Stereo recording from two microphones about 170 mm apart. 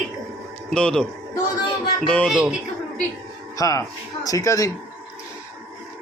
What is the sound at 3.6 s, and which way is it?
Speech, 20° left (ahead or behind).